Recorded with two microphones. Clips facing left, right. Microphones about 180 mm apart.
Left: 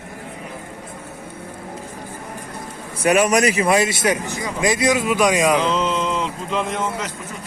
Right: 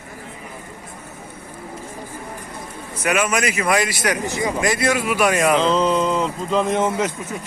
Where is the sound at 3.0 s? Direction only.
40° left (ahead or behind); by 5.6 s 15° left (ahead or behind).